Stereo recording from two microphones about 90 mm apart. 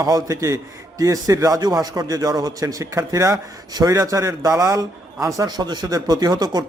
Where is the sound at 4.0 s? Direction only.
35° right (ahead or behind).